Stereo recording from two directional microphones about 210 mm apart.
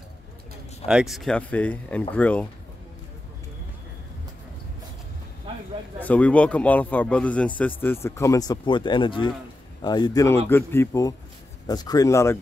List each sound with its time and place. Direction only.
0.8 s a man's voice: centre (ahead or behind)
5.9 s a man's voice: 5° left (ahead or behind)